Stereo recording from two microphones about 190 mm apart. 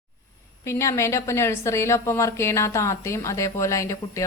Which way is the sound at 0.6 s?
15° left (ahead or behind).